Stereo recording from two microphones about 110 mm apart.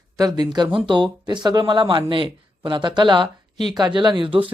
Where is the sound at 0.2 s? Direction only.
35° right (ahead or behind).